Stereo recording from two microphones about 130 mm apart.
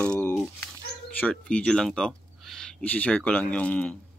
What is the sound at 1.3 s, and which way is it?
Speech, 10° left (ahead or behind).